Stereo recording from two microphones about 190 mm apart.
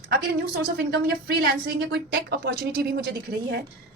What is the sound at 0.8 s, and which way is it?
A woman's voice, 55° right (ahead or behind).